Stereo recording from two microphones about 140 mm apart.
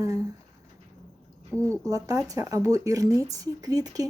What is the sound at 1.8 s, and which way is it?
Speech, 25° right (ahead or behind).